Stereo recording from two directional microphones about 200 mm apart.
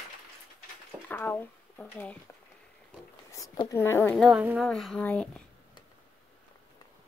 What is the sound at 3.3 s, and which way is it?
Speech, 15° left (ahead or behind).